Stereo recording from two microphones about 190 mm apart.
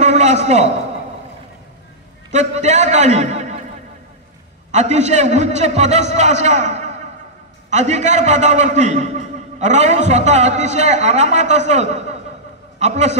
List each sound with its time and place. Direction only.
0.0 s a sound: 35° right (ahead or behind)
2.3 s a man's voice: 35° right (ahead or behind)
4.6 s a man's voice: 35° right (ahead or behind)